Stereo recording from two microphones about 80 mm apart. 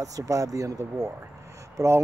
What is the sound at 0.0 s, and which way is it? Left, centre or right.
Speech, right.